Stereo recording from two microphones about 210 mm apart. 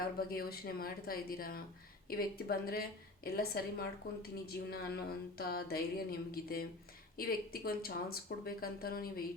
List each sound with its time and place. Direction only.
0.2 s speech: 45° left (ahead or behind)